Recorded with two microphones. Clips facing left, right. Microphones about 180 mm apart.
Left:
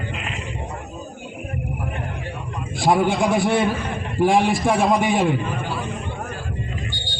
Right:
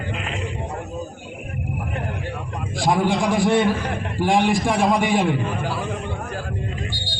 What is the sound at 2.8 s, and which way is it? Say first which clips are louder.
Speech: left 2 dB; 5° left (ahead or behind).